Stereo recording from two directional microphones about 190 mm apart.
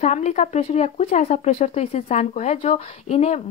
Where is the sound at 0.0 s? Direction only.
35° left (ahead or behind).